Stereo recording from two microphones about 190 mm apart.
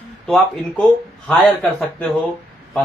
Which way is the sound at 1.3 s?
5° left (ahead or behind).